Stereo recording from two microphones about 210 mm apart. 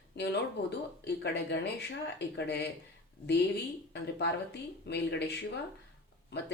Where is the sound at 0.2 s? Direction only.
55° left (ahead or behind).